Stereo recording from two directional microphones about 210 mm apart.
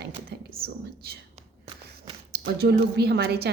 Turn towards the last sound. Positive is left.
turn(degrees=-50)  # may be behind; listen again after turning